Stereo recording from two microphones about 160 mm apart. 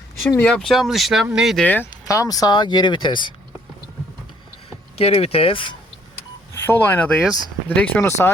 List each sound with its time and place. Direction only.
0.3 s speech: 10° left (ahead or behind)
1.6 s speech: 10° left (ahead or behind); by 3.3 s 30° left (ahead or behind)
4.9 s speech: 35° left (ahead or behind)
6.5 s speech: 15° left (ahead or behind)